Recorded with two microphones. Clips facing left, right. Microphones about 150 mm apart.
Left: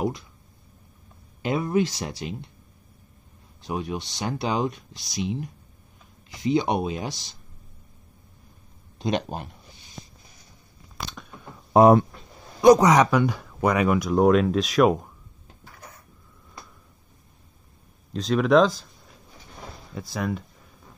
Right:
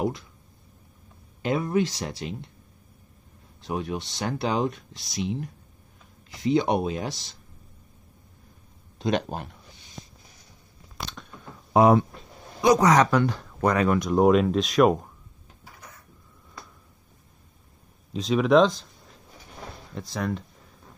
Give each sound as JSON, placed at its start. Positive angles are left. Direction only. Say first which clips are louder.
{"t": 1.4, "sound": "speech", "louder": "left 1 dB", "side_deg": 10}
{"t": 3.6, "sound": "speech", "louder": "even", "side_deg": 5}
{"t": 8.9, "sound": "speech", "louder": "even", "side_deg": 0}
{"t": 11.1, "sound": "a sound", "louder": "left 1 dB", "side_deg": 5}
{"t": 11.7, "sound": "speech", "louder": "left 3 dB", "side_deg": 40}
{"t": 12.7, "sound": "speech", "louder": "left 1 dB", "side_deg": 15}
{"t": 18.1, "sound": "speech", "louder": "even", "side_deg": 0}
{"t": 19.9, "sound": "speech", "louder": "left 1 dB", "side_deg": 5}